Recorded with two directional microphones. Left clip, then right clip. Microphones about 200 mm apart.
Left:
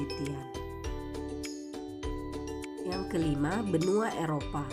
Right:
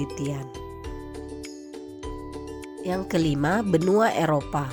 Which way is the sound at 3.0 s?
45° right (ahead or behind).